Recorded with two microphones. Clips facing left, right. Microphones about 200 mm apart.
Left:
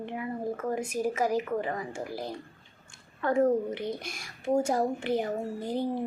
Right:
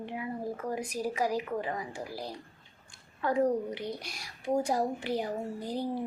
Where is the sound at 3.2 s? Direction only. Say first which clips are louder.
Left 3 dB; 45° left (ahead or behind).